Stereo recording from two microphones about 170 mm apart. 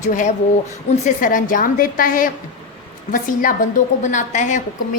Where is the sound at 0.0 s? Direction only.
50° left (ahead or behind).